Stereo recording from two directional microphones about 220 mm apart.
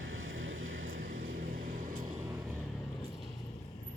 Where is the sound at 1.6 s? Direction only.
40° right (ahead or behind).